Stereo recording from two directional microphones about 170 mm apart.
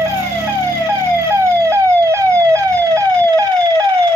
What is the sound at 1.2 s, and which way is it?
Emergency vehicle, 15° right (ahead or behind).